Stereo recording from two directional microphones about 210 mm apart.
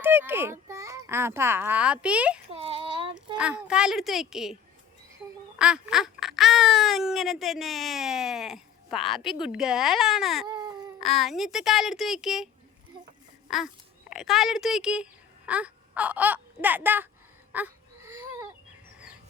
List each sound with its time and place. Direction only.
0.0 s a child's voice: 10° right (ahead or behind)
2.5 s a sound: 30° right (ahead or behind)
3.3 s speech: 5° right (ahead or behind)
5.5 s speech: 5° right (ahead or behind)
10.4 s baby cry: 20° right (ahead or behind)
11.0 s speech: centre (ahead or behind)
13.5 s speech: centre (ahead or behind)
17.5 s a sound: 10° right (ahead or behind)